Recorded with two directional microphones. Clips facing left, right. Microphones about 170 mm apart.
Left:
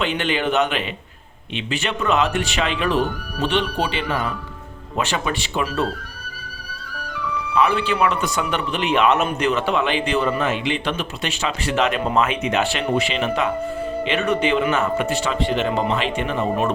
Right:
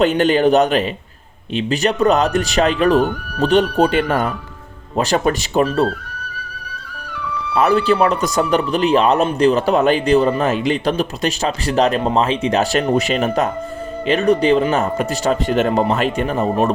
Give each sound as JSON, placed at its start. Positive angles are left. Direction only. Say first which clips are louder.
{"t": 0.0, "sound": "speech", "louder": "right 9 dB", "side_deg": -40}
{"t": 7.5, "sound": "speech", "louder": "right 5 dB", "side_deg": -40}